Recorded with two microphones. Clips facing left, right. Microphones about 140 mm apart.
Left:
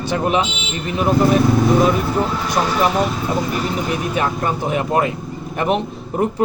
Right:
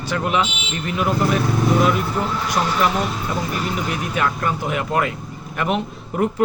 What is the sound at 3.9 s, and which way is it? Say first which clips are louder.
Speech: left 2 dB; 25° left (ahead or behind).